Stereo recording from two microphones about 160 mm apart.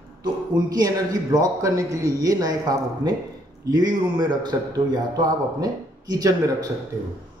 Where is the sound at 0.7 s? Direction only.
20° right (ahead or behind).